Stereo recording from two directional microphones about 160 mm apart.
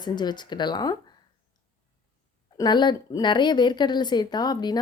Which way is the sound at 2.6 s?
25° left (ahead or behind).